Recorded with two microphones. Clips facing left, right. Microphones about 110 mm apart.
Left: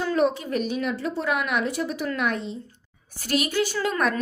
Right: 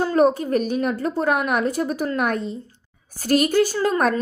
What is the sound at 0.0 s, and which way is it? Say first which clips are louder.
A woman's voice: right 5 dB; 40° right (ahead or behind).